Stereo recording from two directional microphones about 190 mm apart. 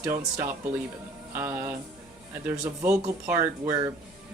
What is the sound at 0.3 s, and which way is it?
Speech, 10° right (ahead or behind).